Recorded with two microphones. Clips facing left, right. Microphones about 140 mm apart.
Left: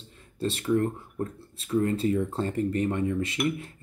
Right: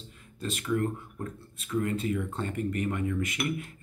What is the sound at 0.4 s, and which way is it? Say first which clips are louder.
Speech: left 4 dB; 30° left (ahead or behind).